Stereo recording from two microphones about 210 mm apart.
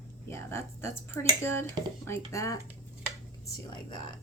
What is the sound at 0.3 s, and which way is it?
Speech, 10° left (ahead or behind).